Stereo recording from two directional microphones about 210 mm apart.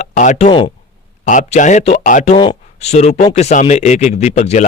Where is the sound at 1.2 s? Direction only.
35° left (ahead or behind).